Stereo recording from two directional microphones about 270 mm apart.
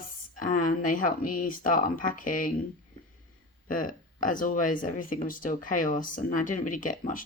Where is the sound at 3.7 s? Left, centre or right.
Left.